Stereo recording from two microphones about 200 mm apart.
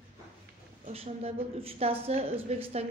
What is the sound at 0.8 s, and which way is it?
A woman's voice, 30° right (ahead or behind).